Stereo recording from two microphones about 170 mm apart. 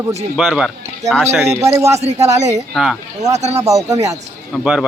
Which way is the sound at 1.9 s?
40° right (ahead or behind).